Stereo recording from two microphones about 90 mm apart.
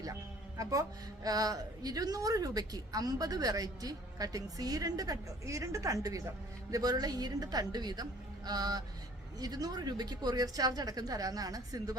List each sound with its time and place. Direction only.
0.0 s a woman's voice: 40° right (ahead or behind)